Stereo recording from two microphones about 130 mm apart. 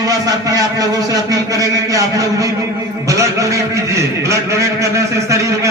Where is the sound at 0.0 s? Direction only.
25° right (ahead or behind).